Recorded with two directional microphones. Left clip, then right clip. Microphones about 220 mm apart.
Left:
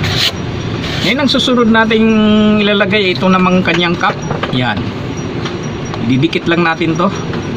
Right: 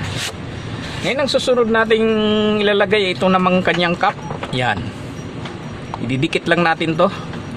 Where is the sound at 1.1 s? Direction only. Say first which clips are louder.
Left 2 dB; 45° right (ahead or behind).